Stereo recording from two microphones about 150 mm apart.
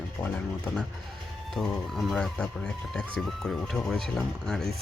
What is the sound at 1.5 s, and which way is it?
Speech, centre (ahead or behind).